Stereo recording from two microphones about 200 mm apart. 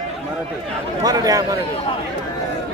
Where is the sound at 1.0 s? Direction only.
20° right (ahead or behind).